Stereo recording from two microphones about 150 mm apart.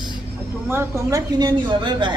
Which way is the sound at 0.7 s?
15° right (ahead or behind).